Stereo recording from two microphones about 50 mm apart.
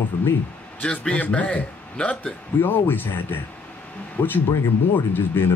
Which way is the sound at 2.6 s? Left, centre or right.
Left.